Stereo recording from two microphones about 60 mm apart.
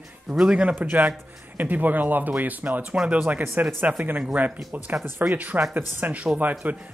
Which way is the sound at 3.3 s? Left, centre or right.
Right.